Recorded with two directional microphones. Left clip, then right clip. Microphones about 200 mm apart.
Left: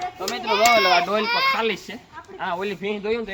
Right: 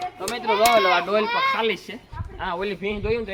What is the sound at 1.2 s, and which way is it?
Speech, 55° left (ahead or behind).